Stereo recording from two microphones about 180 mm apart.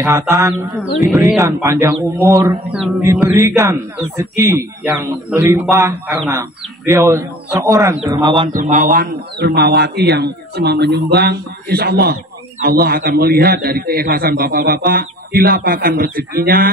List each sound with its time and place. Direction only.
0.3 s a man's voice: 20° right (ahead or behind)
0.9 s speech: centre (ahead or behind)
1.4 s a man's voice: 15° right (ahead or behind)
8.1 s speech: 30° right (ahead or behind)
8.5 s a man's voice: 50° right (ahead or behind)